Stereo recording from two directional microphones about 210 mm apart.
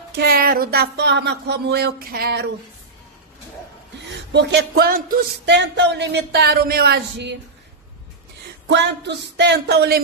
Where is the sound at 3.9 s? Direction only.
55° right (ahead or behind).